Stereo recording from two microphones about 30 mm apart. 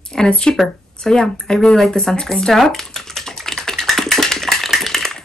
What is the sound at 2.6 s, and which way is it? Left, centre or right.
Typewriter, centre.